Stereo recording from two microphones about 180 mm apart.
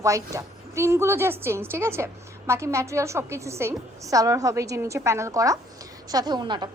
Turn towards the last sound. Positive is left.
turn(degrees=-25)  # may be behind; listen again after turning